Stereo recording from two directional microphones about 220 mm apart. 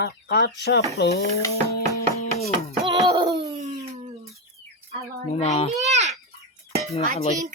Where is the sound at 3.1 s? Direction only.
20° right (ahead or behind).